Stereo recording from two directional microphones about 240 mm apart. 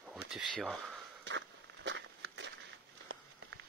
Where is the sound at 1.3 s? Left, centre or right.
Right.